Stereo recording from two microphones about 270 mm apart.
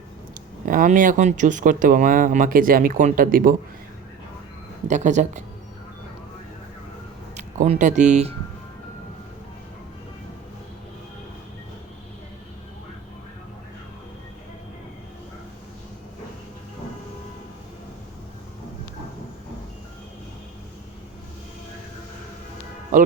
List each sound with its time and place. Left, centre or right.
0.6 s speech: right
4.9 s speech: right
7.3 s speech: right